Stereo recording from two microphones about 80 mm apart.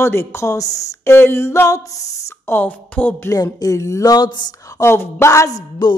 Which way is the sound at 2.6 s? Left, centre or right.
Centre.